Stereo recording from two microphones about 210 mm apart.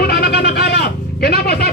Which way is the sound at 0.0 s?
50° left (ahead or behind).